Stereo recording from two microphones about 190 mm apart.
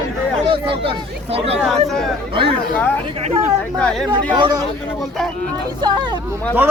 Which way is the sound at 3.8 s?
5° left (ahead or behind).